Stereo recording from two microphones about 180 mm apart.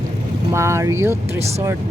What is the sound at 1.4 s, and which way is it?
Speech, 35° right (ahead or behind).